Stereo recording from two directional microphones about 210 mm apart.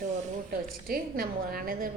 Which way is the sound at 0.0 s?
35° right (ahead or behind).